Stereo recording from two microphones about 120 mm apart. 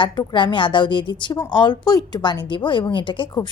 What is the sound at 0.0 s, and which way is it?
A woman's voice, 40° left (ahead or behind).